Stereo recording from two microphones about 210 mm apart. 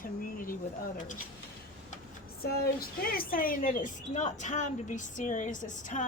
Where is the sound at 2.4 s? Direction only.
50° left (ahead or behind).